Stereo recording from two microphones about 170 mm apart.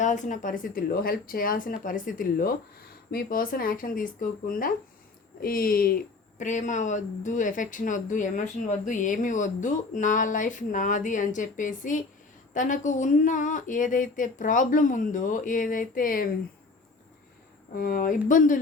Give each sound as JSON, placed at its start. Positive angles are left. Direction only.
{"t": 0.0, "sound": "speech", "side_deg": 45}
{"t": 6.4, "sound": "speech", "side_deg": 45}
{"t": 17.7, "sound": "speech", "side_deg": 55}